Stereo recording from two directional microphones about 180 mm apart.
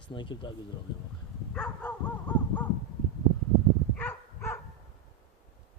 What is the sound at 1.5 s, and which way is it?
Dog, 5° left (ahead or behind).